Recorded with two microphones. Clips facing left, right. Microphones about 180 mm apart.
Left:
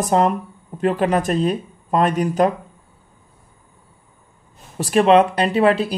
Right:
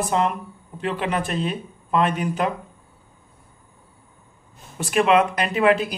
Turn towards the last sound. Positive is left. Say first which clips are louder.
# left 3 dB
turn(degrees=30)  # may be behind; listen again after turning